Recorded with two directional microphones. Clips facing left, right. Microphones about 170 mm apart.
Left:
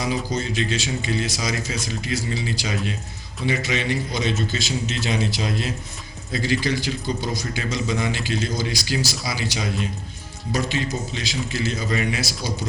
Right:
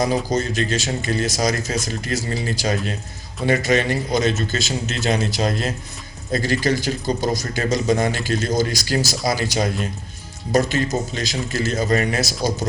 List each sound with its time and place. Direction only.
0.0 s speech: 45° right (ahead or behind)